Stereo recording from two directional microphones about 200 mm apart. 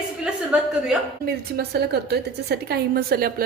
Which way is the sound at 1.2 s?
50° right (ahead or behind).